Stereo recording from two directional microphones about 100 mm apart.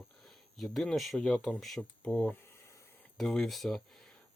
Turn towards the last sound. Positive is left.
turn(degrees=0)  # may be behind; listen again after turning